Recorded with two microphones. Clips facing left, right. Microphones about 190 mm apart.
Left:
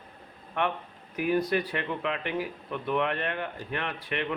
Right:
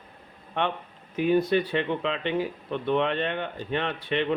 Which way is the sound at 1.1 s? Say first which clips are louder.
Right 4 dB; 25° right (ahead or behind).